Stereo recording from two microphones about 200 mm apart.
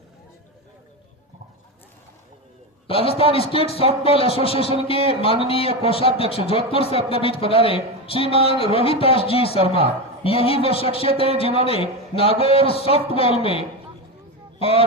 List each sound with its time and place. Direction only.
2.8 s a man's voice: 30° left (ahead or behind)
9.6 s speech: 30° right (ahead or behind)
10.2 s a man's voice: 30° left (ahead or behind)
14.6 s speech: 30° left (ahead or behind)